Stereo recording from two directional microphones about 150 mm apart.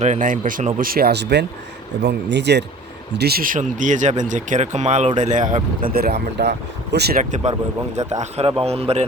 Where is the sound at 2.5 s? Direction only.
90° right; by 5.6 s 55° right (ahead or behind).